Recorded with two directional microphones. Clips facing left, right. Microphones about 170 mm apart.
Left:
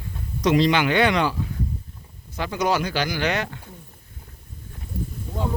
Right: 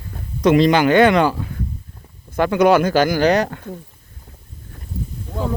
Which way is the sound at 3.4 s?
60° right (ahead or behind).